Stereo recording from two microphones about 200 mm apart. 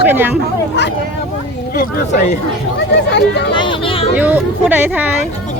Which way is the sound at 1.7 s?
50° left (ahead or behind).